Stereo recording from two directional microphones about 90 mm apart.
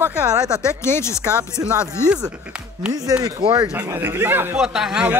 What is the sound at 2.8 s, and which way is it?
Speech, 10° right (ahead or behind).